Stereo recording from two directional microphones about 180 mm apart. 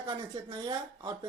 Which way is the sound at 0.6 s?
20° right (ahead or behind).